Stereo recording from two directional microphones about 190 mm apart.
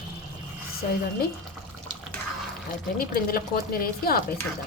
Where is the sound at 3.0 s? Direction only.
50° left (ahead or behind).